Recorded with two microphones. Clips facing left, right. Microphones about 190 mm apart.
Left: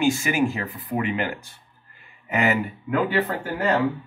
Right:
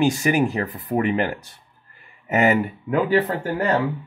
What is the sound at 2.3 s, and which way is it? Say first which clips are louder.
Speech: right 4 dB; 40° right (ahead or behind).